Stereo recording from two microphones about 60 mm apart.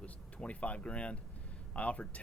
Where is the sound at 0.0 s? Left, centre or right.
Left.